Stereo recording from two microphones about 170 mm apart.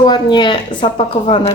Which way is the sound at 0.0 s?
25° left (ahead or behind).